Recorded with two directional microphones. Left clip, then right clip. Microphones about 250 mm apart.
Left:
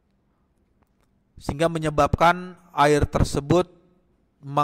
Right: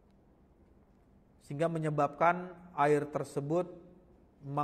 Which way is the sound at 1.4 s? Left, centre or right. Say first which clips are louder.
Left 10 dB; left.